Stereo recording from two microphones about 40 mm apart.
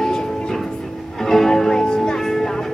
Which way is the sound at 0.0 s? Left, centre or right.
Centre.